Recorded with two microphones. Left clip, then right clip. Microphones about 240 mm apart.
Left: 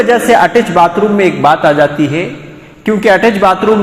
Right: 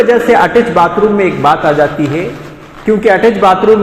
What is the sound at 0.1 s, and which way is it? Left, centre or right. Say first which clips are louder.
A man's voice: even; left.